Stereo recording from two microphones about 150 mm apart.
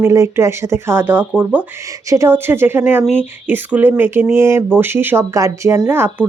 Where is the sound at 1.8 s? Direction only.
20° right (ahead or behind).